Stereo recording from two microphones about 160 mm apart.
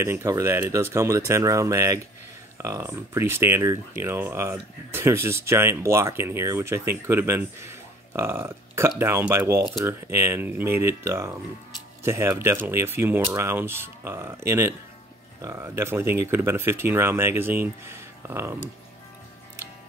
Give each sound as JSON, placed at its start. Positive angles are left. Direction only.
{"t": 0.0, "sound": "speech", "side_deg": -15}